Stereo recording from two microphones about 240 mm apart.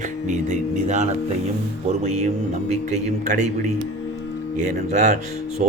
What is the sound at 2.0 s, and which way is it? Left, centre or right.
A man's voice, right.